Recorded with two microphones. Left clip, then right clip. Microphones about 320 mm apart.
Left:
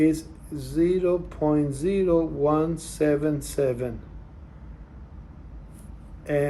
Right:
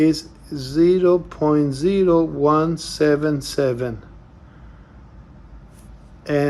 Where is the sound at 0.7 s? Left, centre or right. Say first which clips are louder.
Right 7 dB; centre.